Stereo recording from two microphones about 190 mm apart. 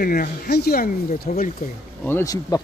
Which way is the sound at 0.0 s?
50° left (ahead or behind).